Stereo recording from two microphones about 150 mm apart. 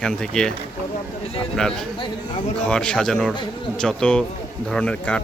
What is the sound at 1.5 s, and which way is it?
Speech, 5° left (ahead or behind).